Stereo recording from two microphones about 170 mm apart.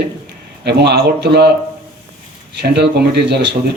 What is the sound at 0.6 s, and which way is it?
Speech, 75° right (ahead or behind).